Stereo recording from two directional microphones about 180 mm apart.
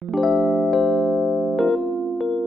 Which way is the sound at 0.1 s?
Centre (ahead or behind).